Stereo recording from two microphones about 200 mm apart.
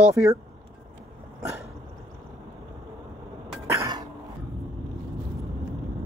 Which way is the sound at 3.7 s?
15° right (ahead or behind).